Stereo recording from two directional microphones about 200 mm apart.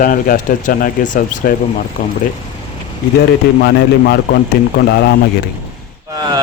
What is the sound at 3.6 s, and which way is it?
Speech, 55° left (ahead or behind).